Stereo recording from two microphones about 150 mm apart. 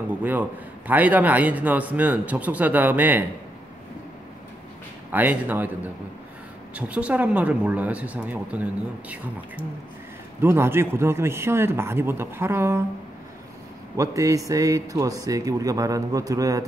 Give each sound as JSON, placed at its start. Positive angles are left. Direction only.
{"t": 0.2, "sound": "a man's voice", "side_deg": -10}
{"t": 5.1, "sound": "a man's voice", "side_deg": -10}
{"t": 6.7, "sound": "a man's voice", "side_deg": -10}
{"t": 10.4, "sound": "a man's voice", "side_deg": -15}
{"t": 13.9, "sound": "speech", "side_deg": -20}